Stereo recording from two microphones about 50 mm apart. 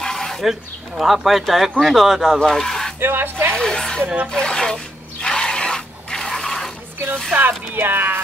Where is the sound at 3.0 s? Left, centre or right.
Right.